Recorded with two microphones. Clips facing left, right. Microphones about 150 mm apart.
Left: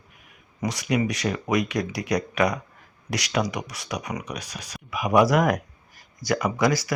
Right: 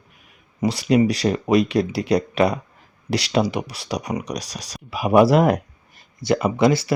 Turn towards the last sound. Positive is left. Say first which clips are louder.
# right 5 dB
turn(degrees=-25)  # may be behind; listen again after turning